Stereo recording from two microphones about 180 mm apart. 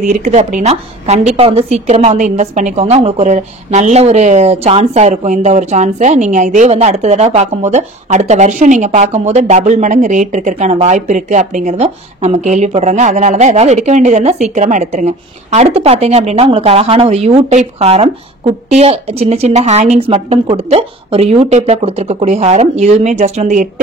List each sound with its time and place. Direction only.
0.0 s a woman's voice: 45° right (ahead or behind)